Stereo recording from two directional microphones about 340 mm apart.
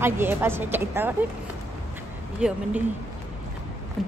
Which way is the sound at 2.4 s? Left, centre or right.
Centre.